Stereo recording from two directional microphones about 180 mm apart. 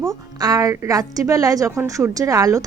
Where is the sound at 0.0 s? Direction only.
20° right (ahead or behind).